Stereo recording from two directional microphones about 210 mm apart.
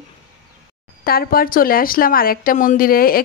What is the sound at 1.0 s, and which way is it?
A woman's voice, 45° left (ahead or behind).